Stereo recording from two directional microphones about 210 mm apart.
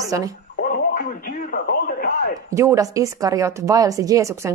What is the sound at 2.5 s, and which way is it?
Speech, 15° right (ahead or behind).